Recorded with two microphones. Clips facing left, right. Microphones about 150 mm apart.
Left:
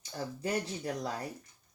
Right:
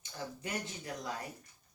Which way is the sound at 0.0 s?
35° left (ahead or behind).